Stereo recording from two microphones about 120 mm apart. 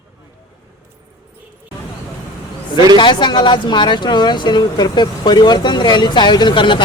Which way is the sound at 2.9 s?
40° left (ahead or behind).